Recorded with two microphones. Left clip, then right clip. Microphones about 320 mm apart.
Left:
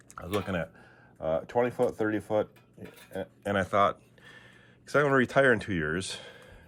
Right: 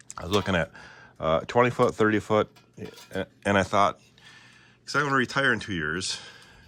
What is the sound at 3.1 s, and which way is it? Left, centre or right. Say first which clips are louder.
Speech: right 6 dB; right.